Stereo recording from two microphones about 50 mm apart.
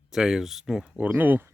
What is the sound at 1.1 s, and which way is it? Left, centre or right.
Speech, right.